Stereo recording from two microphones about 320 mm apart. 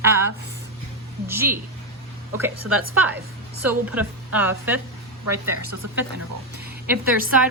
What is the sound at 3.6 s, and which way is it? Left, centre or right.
A woman's voice, centre.